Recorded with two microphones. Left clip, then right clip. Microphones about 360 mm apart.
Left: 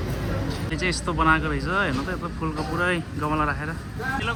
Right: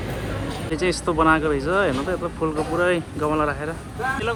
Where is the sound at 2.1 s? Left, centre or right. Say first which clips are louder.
Right 6 dB; right.